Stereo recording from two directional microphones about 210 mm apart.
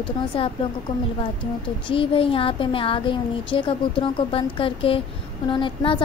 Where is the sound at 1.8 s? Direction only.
25° left (ahead or behind).